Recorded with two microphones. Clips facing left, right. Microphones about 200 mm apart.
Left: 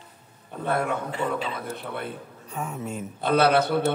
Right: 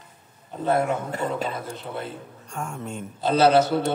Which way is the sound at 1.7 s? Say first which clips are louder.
Even; 60° left (ahead or behind).